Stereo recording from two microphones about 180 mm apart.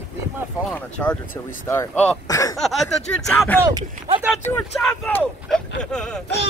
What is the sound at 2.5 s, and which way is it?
Speech, centre (ahead or behind).